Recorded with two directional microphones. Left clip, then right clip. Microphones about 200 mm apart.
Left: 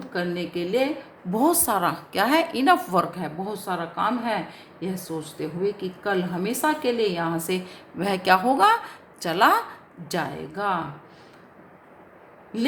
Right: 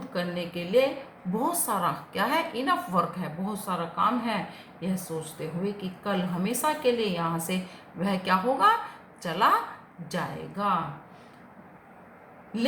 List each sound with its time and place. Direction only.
0.0 s a woman's voice: 45° left (ahead or behind)